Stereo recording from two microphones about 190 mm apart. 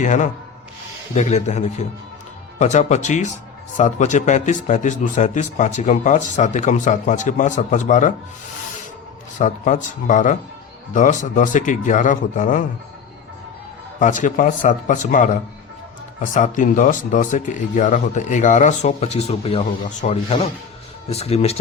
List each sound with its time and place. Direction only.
0.0 s speech: 40° left (ahead or behind)
9.4 s speech: 40° left (ahead or behind)
14.0 s speech: 40° left (ahead or behind)